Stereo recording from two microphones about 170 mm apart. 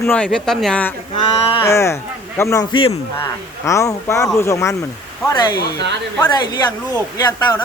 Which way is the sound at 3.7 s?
20° left (ahead or behind).